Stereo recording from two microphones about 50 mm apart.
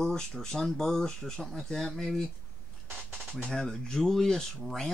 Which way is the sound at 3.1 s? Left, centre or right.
Centre.